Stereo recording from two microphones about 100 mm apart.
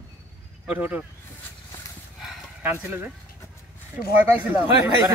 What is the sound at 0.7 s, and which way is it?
Speech, 15° right (ahead or behind).